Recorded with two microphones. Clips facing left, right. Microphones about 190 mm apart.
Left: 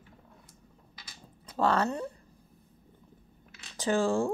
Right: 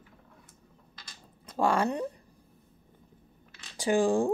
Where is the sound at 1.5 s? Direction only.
10° right (ahead or behind).